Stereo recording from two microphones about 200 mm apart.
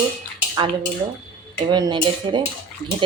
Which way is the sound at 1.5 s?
20° right (ahead or behind).